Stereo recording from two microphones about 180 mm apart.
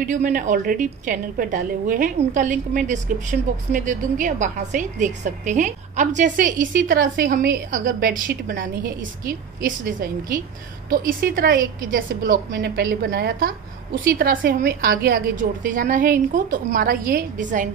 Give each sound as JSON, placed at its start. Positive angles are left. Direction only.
{"t": 0.0, "sound": "a woman's voice", "side_deg": -45}
{"t": 12.4, "sound": "a woman's voice", "side_deg": -75}